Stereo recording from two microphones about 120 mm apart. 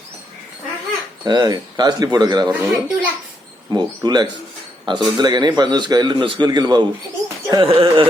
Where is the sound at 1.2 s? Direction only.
35° right (ahead or behind).